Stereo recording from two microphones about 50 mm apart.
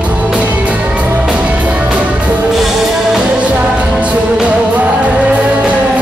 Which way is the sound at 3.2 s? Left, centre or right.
Right.